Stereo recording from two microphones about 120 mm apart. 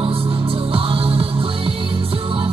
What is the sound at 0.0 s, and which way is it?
Music, 50° right (ahead or behind).